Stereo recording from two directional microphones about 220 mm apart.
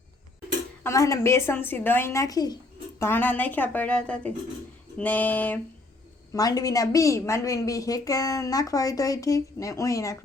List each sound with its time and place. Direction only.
0.9 s a woman's voice: 15° left (ahead or behind)